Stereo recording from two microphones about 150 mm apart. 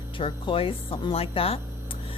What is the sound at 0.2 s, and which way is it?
A woman's voice, 35° left (ahead or behind).